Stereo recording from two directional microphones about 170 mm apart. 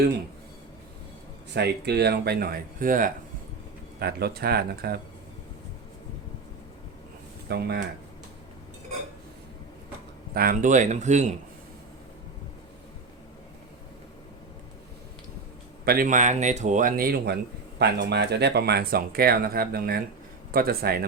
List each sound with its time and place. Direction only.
1.5 s speech: 75° right (ahead or behind); by 3.1 s 55° right (ahead or behind)
4.0 s speech: 65° right (ahead or behind)
7.4 s speech: 75° right (ahead or behind)
10.3 s speech: 55° right (ahead or behind)
15.9 s speech: 55° right (ahead or behind)
17.7 s speech: 80° right; by 21.0 s 60° right (ahead or behind)